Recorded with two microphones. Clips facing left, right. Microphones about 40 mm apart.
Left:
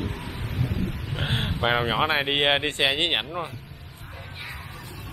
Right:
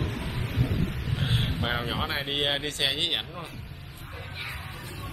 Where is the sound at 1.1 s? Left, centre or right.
Left.